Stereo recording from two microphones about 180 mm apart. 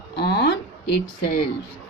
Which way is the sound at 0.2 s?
65° left (ahead or behind).